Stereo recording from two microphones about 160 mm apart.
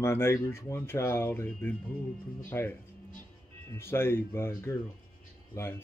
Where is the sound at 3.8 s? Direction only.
15° left (ahead or behind).